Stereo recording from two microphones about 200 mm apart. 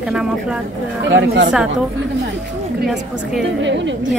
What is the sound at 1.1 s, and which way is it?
Speech, 60° right (ahead or behind).